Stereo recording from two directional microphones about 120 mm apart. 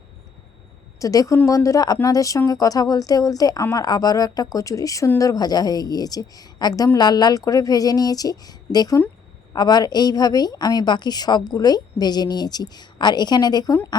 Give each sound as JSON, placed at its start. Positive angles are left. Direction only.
{"t": 0.9, "sound": "a woman's voice", "side_deg": 30}